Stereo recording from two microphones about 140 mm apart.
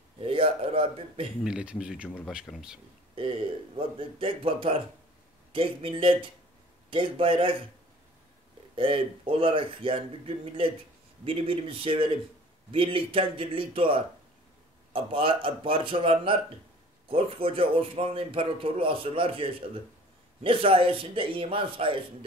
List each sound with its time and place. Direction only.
0.2 s speech: 40° right (ahead or behind)
1.4 s speech: 5° right (ahead or behind)
3.2 s a man's voice: 40° right (ahead or behind)
8.7 s a man's voice: 40° right (ahead or behind)